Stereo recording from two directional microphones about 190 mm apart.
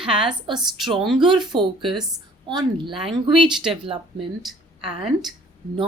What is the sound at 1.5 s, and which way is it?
A woman's voice, 25° right (ahead or behind).